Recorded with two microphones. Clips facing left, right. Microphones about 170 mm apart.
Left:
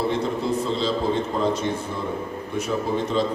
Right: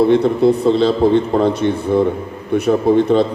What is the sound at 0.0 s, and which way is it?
A man's voice, 65° right (ahead or behind).